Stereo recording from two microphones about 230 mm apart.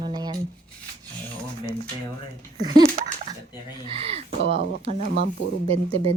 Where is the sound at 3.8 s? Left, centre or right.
Right.